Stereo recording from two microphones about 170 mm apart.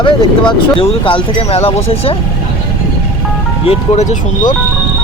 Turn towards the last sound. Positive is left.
turn(degrees=45)  # may be behind; listen again after turning